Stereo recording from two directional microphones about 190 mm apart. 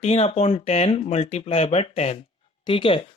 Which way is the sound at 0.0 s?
30° left (ahead or behind).